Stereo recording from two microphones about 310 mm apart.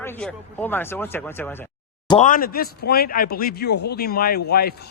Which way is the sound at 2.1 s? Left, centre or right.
Left.